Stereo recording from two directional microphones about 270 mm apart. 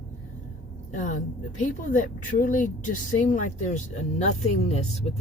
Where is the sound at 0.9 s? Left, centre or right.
Left.